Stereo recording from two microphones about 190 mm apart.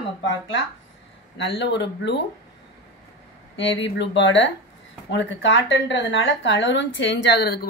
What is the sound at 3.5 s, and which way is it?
Speech, 75° left (ahead or behind).